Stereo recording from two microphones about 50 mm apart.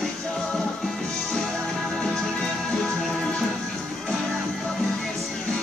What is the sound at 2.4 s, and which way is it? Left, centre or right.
Music, centre.